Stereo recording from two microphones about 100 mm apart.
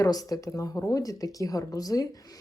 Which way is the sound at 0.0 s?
40° left (ahead or behind).